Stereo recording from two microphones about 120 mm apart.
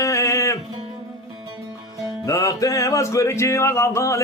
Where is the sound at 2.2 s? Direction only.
30° left (ahead or behind).